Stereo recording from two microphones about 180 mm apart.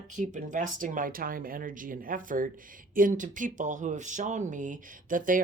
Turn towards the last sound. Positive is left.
turn(degrees=-50)  # may be behind; listen again after turning